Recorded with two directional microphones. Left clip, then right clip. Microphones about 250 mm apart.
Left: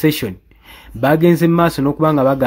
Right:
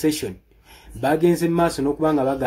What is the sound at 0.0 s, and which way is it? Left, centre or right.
Speech, left.